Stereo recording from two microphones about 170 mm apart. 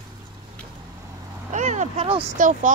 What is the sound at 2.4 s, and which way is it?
Speech, 50° right (ahead or behind).